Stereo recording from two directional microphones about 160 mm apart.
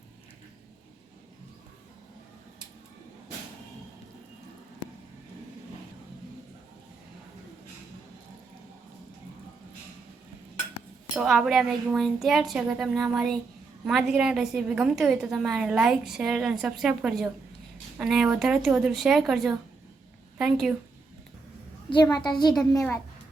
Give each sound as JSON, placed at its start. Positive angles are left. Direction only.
{"t": 11.1, "sound": "a woman's voice", "side_deg": 0}
{"t": 22.0, "sound": "a woman's voice", "side_deg": 25}